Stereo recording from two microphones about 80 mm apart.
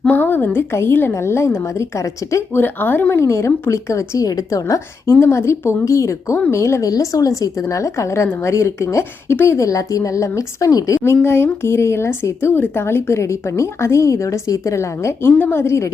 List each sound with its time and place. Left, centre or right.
0.1 s a woman's voice: left
2.6 s a woman's voice: left
5.2 s a woman's voice: left
15.3 s a woman's voice: left